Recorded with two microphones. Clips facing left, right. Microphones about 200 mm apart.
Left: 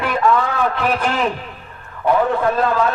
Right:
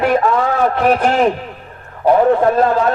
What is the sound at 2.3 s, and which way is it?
Speech, 45° right (ahead or behind).